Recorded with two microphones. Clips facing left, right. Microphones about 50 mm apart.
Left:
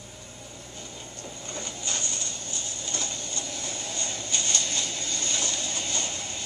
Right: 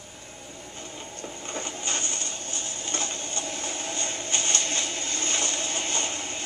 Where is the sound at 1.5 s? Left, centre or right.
Right.